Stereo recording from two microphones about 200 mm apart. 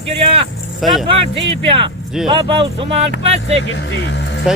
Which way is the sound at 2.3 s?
25° right (ahead or behind).